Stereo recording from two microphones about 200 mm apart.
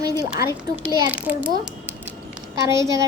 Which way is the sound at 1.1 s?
5° right (ahead or behind).